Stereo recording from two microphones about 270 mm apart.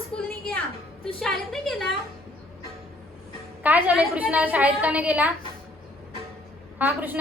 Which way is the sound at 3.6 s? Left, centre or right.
Centre.